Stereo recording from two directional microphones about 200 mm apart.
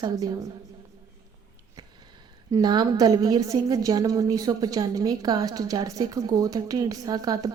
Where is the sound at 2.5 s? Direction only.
20° right (ahead or behind).